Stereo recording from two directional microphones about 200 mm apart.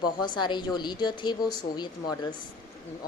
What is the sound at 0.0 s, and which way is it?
Speech, 20° left (ahead or behind).